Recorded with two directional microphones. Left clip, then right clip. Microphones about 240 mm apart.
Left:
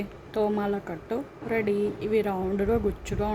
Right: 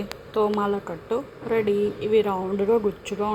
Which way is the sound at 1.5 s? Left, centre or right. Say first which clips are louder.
Right 4 dB; left.